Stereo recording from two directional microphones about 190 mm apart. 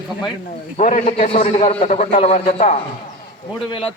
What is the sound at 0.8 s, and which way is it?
A man's voice, 40° left (ahead or behind).